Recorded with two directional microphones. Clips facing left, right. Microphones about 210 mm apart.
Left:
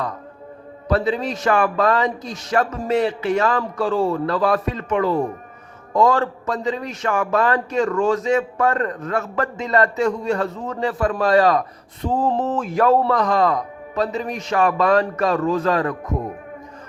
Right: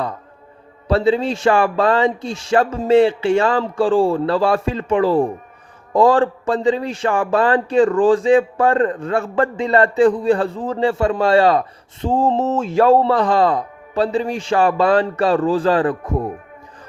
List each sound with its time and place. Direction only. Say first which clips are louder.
0.9 s a man's voice: right 4 dB; 30° right (ahead or behind)